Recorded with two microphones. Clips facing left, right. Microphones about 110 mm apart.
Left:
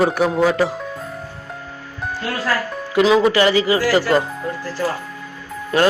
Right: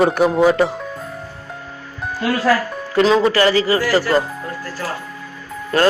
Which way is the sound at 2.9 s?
10° left (ahead or behind).